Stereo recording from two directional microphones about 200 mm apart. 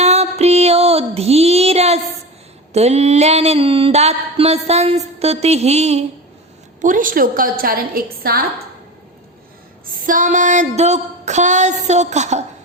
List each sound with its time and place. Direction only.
0.0 s music: 35° right (ahead or behind)
2.7 s mantra: 35° right (ahead or behind)
6.8 s a woman's voice: 40° right (ahead or behind)
9.9 s mantra: 40° right (ahead or behind)